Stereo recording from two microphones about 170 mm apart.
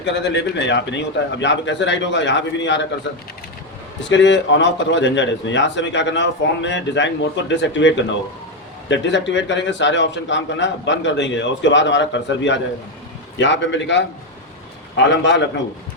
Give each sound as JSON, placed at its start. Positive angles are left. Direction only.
{"t": 0.0, "sound": "a man's voice", "side_deg": 90}
{"t": 4.1, "sound": "a man's voice", "side_deg": 90}